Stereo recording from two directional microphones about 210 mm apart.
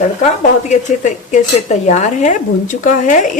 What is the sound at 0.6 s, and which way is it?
Speech, 35° left (ahead or behind).